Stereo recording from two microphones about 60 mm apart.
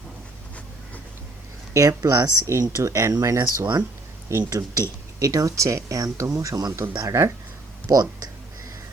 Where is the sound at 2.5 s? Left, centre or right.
Right.